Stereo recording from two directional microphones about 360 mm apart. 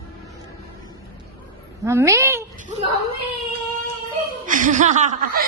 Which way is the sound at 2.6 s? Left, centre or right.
Centre.